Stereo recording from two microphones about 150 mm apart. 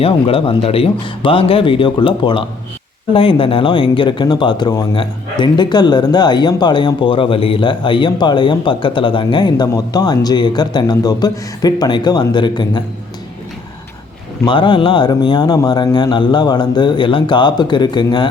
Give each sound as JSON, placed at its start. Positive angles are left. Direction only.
{"t": 0.0, "sound": "speech", "side_deg": 40}
{"t": 14.4, "sound": "speech", "side_deg": 35}